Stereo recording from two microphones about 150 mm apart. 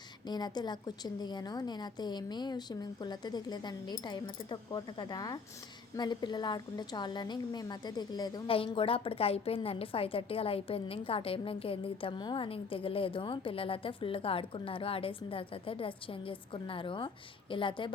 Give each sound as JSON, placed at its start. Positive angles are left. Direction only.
{"t": 0.3, "sound": "a woman's voice", "side_deg": 30}